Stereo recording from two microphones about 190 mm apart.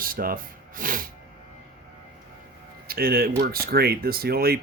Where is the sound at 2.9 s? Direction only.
55° right (ahead or behind).